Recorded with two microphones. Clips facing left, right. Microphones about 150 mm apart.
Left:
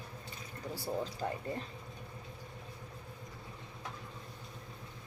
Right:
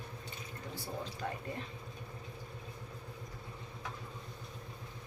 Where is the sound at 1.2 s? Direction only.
30° left (ahead or behind).